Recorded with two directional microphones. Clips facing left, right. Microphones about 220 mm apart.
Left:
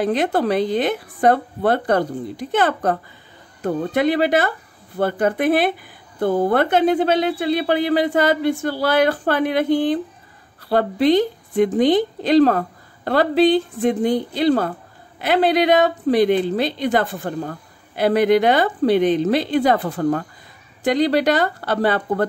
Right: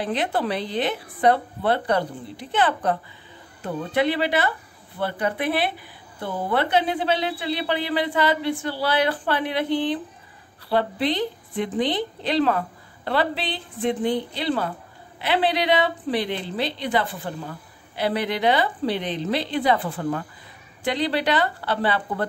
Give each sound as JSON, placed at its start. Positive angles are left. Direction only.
{"t": 0.0, "sound": "a woman's voice", "side_deg": 45}